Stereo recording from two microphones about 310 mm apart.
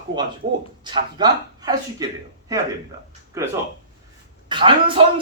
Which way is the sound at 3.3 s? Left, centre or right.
Centre.